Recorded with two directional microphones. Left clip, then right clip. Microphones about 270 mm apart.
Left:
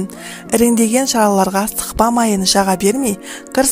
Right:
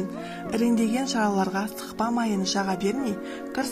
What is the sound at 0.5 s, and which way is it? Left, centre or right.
Speech, left.